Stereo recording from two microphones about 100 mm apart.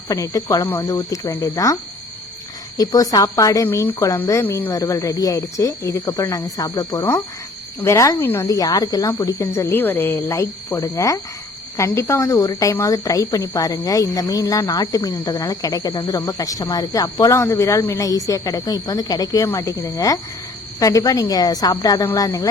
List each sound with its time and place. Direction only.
0.1 s a woman's voice: 30° left (ahead or behind)
4.7 s a woman's voice: 35° left (ahead or behind)
8.4 s a woman's voice: 35° left (ahead or behind)